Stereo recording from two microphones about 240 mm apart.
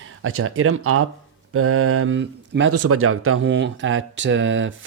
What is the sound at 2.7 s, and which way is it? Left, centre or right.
Speech, right.